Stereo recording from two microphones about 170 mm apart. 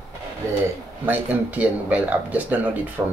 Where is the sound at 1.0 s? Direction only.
10° right (ahead or behind).